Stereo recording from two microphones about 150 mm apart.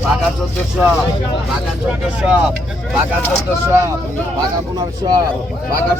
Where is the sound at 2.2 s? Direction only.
5° right (ahead or behind).